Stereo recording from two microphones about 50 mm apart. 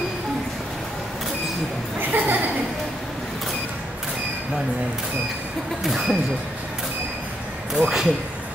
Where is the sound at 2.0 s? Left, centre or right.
Right.